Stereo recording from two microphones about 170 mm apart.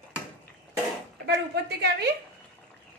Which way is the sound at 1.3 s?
80° right.